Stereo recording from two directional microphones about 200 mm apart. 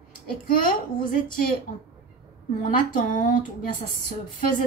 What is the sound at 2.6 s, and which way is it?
Speech, 40° left (ahead or behind).